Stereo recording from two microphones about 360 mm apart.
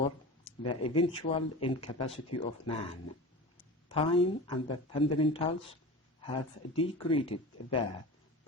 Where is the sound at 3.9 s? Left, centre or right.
Centre.